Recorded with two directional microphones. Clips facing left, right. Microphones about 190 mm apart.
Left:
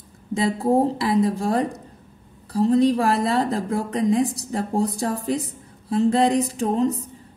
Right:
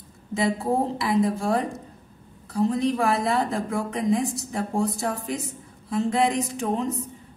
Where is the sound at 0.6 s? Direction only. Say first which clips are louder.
Left 5 dB; 35° left (ahead or behind).